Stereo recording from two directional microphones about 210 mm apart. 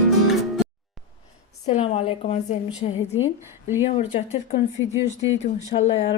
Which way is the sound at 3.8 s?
30° left (ahead or behind).